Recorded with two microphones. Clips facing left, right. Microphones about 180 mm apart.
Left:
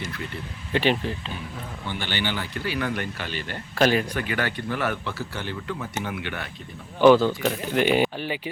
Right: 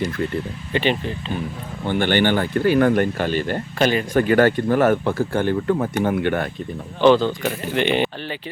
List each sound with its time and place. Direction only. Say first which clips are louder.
0.7 s speech: right 1 dB; centre (ahead or behind)
1.8 s speech: right 12 dB; 55° right (ahead or behind)
3.8 s speech: right 1 dB; centre (ahead or behind)
4.1 s speech: right 12 dB; 45° right (ahead or behind)
7.0 s speech: right 1 dB; 5° left (ahead or behind)